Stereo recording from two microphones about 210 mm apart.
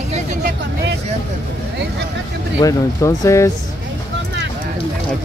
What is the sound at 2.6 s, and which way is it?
Speech, 15° left (ahead or behind).